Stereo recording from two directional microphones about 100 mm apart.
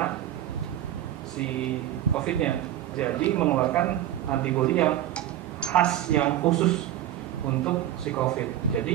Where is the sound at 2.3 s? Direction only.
10° left (ahead or behind).